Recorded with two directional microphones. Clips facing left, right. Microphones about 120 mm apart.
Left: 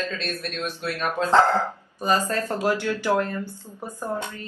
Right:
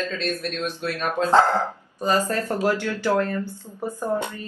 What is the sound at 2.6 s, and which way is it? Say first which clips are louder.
Speech: right 1 dB; 15° left (ahead or behind).